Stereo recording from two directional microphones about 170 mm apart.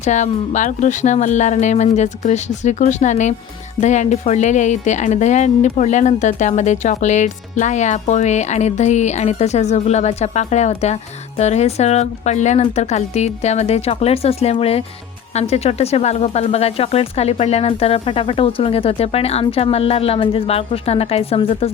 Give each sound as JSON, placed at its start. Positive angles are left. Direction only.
{"t": 0.0, "sound": "speech", "side_deg": 45}